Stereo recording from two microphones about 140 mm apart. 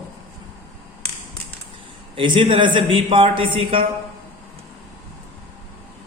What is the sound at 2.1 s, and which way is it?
A woman's voice, 35° right (ahead or behind).